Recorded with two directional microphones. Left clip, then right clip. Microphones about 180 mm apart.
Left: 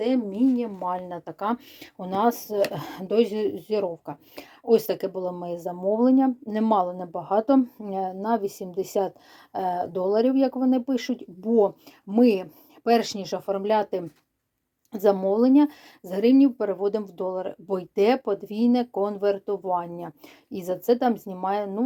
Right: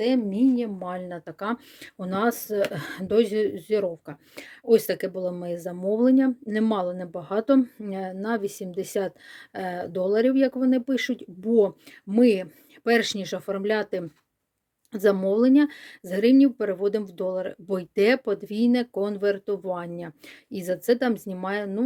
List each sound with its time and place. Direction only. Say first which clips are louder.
0.0 s speech: right 1 dB; 35° right (ahead or behind)